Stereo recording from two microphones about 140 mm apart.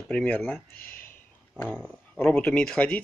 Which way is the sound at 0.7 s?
90° left.